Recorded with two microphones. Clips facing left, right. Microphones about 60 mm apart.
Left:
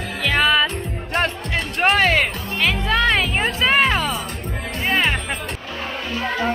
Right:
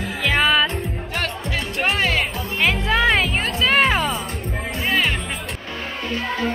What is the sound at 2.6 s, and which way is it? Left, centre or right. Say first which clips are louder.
Music: even; centre.